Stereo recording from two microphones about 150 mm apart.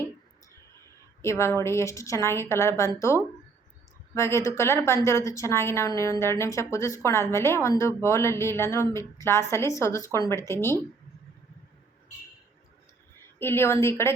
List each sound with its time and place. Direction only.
1.2 s a woman's voice: 20° left (ahead or behind)
13.1 s a woman's voice: 15° left (ahead or behind)